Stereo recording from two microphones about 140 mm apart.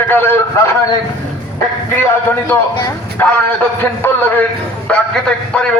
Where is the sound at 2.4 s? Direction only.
15° left (ahead or behind).